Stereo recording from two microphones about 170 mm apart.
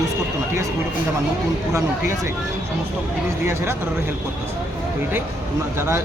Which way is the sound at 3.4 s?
15° right (ahead or behind).